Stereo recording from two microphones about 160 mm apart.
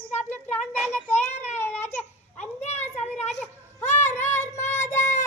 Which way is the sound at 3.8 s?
45° left (ahead or behind).